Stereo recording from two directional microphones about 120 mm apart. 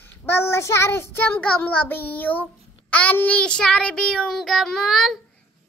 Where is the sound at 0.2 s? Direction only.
20° left (ahead or behind).